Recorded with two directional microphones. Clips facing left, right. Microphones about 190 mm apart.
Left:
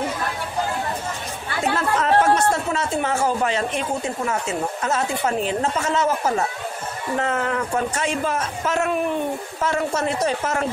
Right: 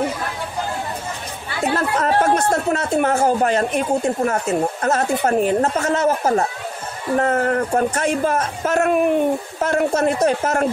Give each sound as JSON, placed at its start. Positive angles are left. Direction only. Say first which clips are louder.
{"t": 1.8, "sound": "speech", "louder": "even", "side_deg": -45}